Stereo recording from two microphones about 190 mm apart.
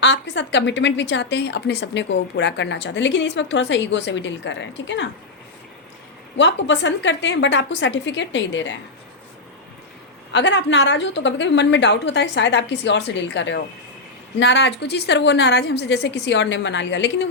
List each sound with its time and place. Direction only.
0.0 s a woman's voice: 65° left (ahead or behind)
6.3 s a woman's voice: 70° left (ahead or behind)
10.3 s a woman's voice: 70° left (ahead or behind)